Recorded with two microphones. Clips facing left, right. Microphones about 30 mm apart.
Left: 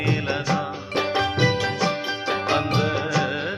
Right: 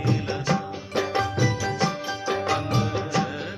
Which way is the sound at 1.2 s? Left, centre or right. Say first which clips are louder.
Left 4 dB; left.